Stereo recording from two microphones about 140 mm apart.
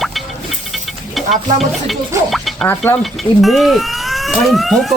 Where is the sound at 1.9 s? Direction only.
Centre (ahead or behind).